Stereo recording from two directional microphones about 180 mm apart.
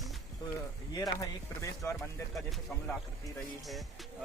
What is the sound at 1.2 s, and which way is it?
Speech, 15° left (ahead or behind).